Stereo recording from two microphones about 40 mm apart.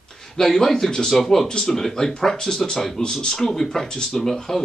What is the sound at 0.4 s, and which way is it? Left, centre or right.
Speech, centre.